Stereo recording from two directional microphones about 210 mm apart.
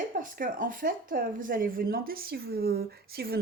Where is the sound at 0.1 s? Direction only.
40° right (ahead or behind).